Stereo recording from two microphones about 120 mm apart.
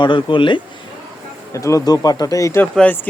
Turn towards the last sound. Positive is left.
turn(degrees=15)  # may be behind; listen again after turning